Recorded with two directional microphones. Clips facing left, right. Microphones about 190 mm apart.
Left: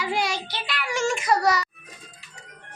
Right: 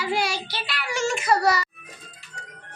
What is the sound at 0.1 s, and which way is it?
Child singing, 20° left (ahead or behind).